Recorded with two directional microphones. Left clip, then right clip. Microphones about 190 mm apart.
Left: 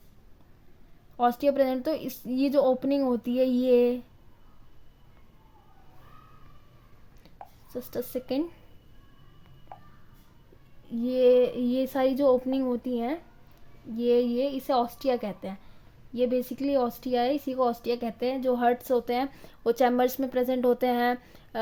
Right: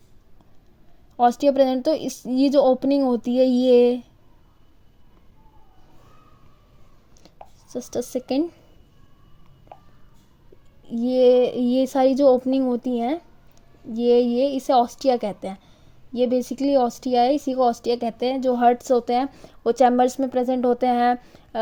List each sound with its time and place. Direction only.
1.1 s speech: 25° right (ahead or behind)
7.7 s speech: 25° right (ahead or behind)
10.8 s a woman's voice: 25° right (ahead or behind)